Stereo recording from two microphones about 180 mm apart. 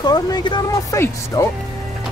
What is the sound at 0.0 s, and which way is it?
Speech, 20° left (ahead or behind).